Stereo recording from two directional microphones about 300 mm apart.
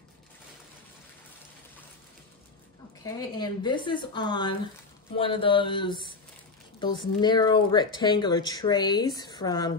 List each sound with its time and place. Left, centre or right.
3.0 s speech: centre